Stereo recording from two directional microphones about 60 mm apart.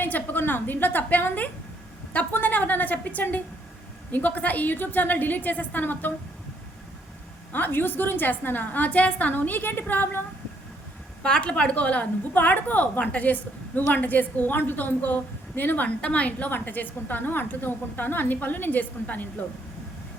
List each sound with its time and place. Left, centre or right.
0.0 s a woman's voice: left
7.5 s a woman's voice: left
11.2 s a woman's voice: centre